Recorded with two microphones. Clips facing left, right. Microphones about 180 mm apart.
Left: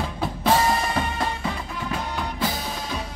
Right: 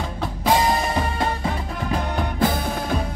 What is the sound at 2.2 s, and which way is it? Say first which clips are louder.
Music: right 5 dB; 50° right (ahead or behind).